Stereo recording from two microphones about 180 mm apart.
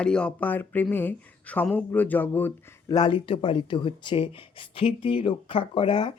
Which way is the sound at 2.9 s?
25° left (ahead or behind).